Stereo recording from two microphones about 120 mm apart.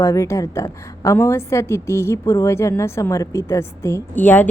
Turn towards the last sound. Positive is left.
turn(degrees=15)  # may be behind; listen again after turning